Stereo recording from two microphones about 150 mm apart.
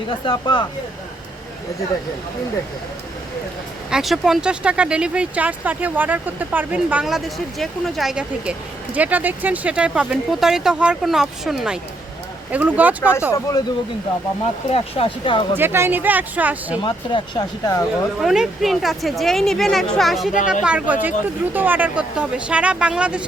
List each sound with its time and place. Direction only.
0.3 s speech: 30° left (ahead or behind)
3.8 s speech: 5° right (ahead or behind)
14.7 s speech: 40° left (ahead or behind)
15.5 s speech: 15° right (ahead or behind)
16.8 s speech: 30° left (ahead or behind)
17.7 s speech: 20° left (ahead or behind)
18.2 s speech: centre (ahead or behind)
20.3 s speech: 60° left (ahead or behind)
20.7 s speech: 10° right (ahead or behind)